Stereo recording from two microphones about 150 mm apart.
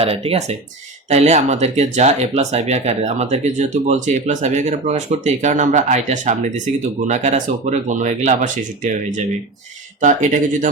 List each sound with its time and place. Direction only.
0.0 s speech: 40° right (ahead or behind)